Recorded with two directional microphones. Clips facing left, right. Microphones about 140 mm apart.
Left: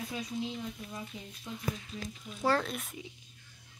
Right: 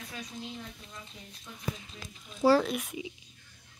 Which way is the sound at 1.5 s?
15° left (ahead or behind).